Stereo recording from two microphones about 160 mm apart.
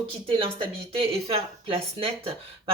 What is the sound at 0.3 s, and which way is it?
Speech, 35° right (ahead or behind).